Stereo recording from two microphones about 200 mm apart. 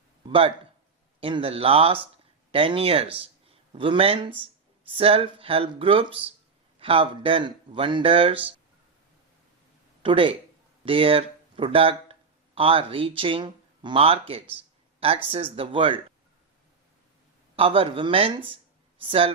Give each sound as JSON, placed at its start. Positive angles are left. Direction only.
{"t": 0.2, "sound": "a sound", "side_deg": -25}
{"t": 1.2, "sound": "speech", "side_deg": -25}
{"t": 10.0, "sound": "speech", "side_deg": -25}
{"t": 17.6, "sound": "speech", "side_deg": -25}